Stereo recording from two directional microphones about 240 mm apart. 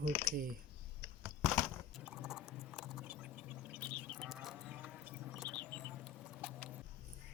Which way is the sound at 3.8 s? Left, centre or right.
Centre.